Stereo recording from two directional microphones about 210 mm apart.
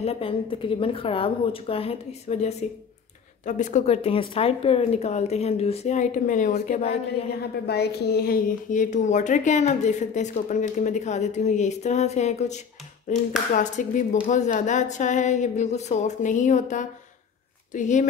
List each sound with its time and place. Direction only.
0.0 s a woman's voice: 30° left (ahead or behind)
7.6 s a woman's voice: 50° left (ahead or behind); by 18.0 s 35° left (ahead or behind)